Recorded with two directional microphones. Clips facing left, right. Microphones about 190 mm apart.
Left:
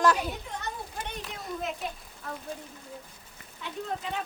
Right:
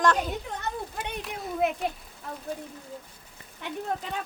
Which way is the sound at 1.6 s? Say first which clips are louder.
Right 10 dB; 60° right (ahead or behind).